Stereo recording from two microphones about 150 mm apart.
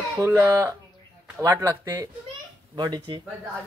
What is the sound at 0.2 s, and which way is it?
Speech, 15° right (ahead or behind).